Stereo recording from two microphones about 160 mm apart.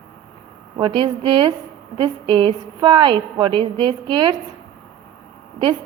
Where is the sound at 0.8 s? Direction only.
30° right (ahead or behind).